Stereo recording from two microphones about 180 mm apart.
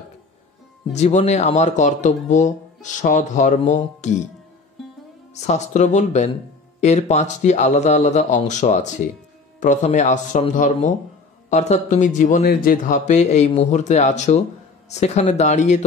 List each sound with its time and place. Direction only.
0.9 s speech: 40° left (ahead or behind)
5.3 s speech: 40° left (ahead or behind)